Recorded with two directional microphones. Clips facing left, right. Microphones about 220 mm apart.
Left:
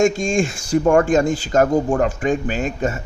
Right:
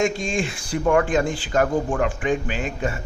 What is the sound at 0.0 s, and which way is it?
A man's voice, 45° left (ahead or behind).